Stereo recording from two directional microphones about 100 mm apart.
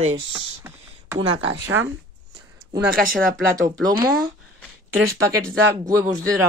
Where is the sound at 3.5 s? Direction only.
35° right (ahead or behind).